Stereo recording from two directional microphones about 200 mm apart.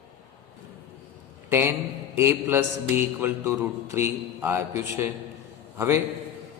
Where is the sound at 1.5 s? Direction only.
10° right (ahead or behind).